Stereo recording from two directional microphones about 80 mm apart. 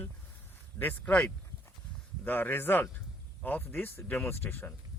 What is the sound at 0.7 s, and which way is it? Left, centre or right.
Speech, left.